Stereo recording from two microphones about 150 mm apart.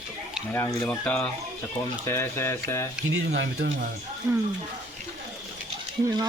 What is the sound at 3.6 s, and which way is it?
Speech, 90° right.